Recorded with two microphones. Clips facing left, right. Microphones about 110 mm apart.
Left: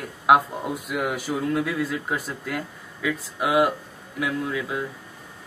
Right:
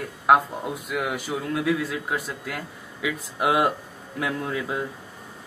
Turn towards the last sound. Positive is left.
turn(degrees=-25)  # may be behind; listen again after turning